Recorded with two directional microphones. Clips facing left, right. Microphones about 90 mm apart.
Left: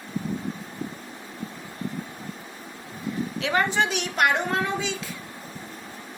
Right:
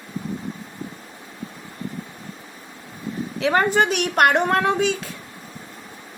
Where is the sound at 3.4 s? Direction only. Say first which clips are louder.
Right 6 dB; 45° right (ahead or behind).